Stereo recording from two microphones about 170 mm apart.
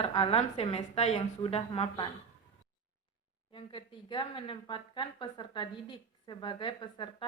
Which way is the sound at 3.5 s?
30° left (ahead or behind).